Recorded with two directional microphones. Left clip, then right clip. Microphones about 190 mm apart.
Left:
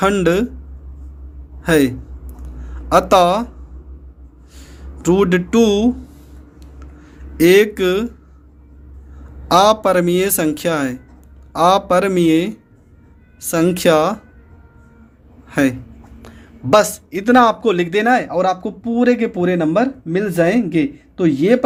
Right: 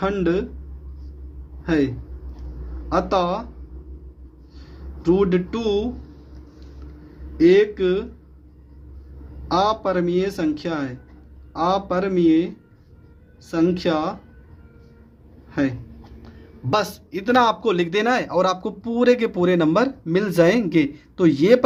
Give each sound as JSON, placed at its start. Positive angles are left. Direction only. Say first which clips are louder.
{"t": 0.0, "sound": "speech", "louder": "left 7 dB", "side_deg": 45}
{"t": 1.6, "sound": "a man's voice", "louder": "left 7 dB", "side_deg": 45}
{"t": 2.9, "sound": "speech", "louder": "left 9 dB", "side_deg": 45}
{"t": 5.0, "sound": "speech", "louder": "left 4 dB", "side_deg": 40}
{"t": 7.3, "sound": "speech", "louder": "left 4 dB", "side_deg": 45}
{"t": 9.5, "sound": "speech", "louder": "left 8 dB", "side_deg": 45}
{"t": 15.4, "sound": "a sound", "louder": "left 7 dB", "side_deg": 40}
{"t": 16.2, "sound": "speech", "louder": "left 8 dB", "side_deg": 30}